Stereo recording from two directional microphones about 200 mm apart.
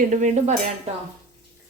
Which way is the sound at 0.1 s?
35° right (ahead or behind).